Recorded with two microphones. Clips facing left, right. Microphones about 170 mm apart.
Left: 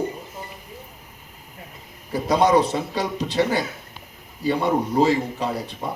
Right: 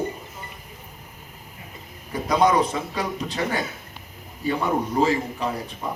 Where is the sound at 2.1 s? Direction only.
35° left (ahead or behind).